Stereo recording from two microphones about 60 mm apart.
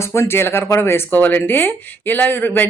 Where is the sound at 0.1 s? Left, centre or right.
Left.